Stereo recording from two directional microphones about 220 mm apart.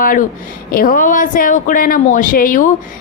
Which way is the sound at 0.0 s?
40° left (ahead or behind).